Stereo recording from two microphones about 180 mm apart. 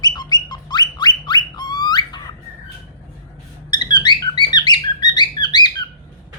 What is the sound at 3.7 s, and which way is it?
Squeak, 25° left (ahead or behind).